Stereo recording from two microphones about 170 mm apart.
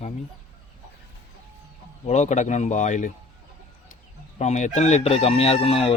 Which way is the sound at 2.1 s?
45° left (ahead or behind).